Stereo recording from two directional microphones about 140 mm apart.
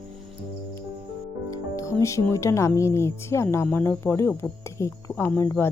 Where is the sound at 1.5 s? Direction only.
25° left (ahead or behind).